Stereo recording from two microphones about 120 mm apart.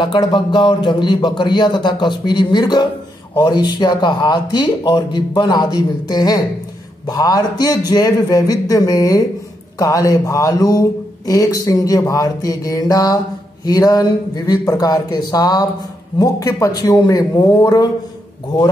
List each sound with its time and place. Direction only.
0.0 s speech: 40° left (ahead or behind)